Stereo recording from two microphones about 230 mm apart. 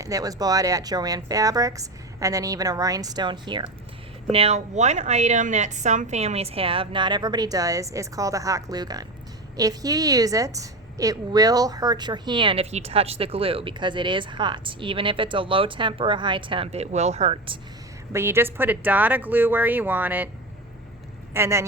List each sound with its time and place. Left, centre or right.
0.0 s a woman's voice: centre
18.1 s a woman's voice: centre
21.3 s a woman's voice: centre